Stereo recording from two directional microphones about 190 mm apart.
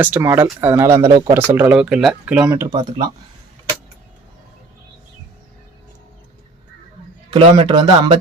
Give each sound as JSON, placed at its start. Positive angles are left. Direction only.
{"t": 0.0, "sound": "speech", "side_deg": -10}
{"t": 7.3, "sound": "speech", "side_deg": -25}